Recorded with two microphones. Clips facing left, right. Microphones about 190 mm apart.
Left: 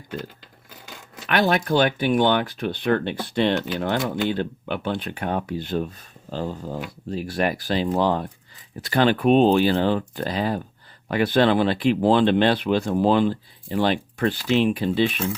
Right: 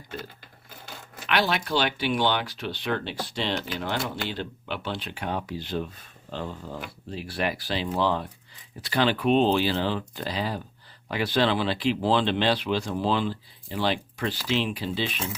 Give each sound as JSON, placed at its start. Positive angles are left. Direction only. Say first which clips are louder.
{"t": 1.3, "sound": "speech", "louder": "left 5 dB", "side_deg": 50}